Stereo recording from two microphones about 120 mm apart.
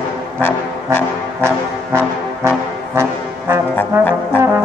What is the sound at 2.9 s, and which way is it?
Brass instrument, 20° right (ahead or behind).